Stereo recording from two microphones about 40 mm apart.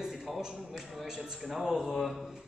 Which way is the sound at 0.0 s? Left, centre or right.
Centre.